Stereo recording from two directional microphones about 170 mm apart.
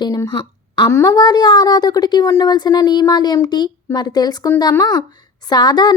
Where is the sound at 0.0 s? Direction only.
25° left (ahead or behind).